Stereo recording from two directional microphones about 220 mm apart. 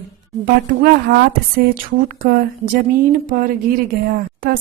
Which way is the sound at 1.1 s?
50° right (ahead or behind).